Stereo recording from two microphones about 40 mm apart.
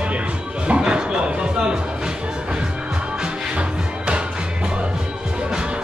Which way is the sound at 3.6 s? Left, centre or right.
Right.